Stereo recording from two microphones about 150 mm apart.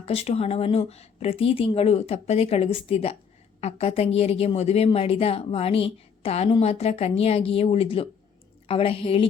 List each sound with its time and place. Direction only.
0.0 s a woman's voice: 40° left (ahead or behind)